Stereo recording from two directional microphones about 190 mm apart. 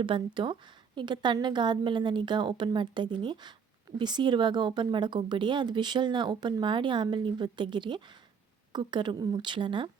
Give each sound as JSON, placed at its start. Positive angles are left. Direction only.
{"t": 0.0, "sound": "speech", "side_deg": -25}